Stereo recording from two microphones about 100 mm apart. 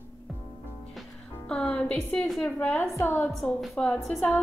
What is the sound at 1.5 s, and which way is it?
A woman's voice, 10° left (ahead or behind).